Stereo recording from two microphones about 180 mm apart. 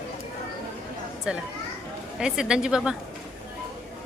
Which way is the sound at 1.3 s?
5° right (ahead or behind).